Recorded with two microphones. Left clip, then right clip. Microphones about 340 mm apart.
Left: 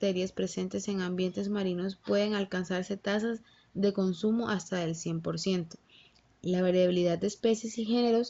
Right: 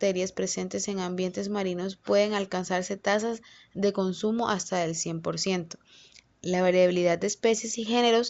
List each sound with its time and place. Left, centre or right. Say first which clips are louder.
0.0 s speech: right 4 dB; centre